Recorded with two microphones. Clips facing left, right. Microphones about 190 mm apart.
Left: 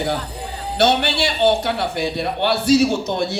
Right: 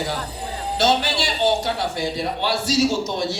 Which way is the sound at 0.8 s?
60° left (ahead or behind).